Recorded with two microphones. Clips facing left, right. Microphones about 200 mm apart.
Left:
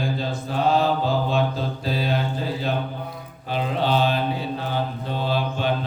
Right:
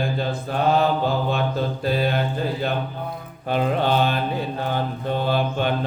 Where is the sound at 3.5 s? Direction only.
55° right (ahead or behind).